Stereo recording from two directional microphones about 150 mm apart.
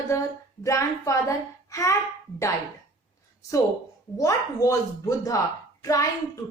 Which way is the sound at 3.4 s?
20° left (ahead or behind).